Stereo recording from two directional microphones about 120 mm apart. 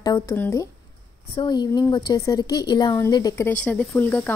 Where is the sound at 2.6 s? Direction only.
35° left (ahead or behind).